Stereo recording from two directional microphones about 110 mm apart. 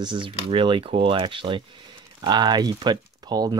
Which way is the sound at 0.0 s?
45° right (ahead or behind).